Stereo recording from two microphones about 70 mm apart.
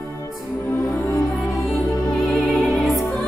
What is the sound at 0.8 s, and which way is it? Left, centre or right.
Music, left.